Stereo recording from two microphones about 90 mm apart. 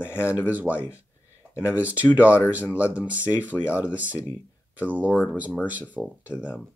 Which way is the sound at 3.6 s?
25° left (ahead or behind).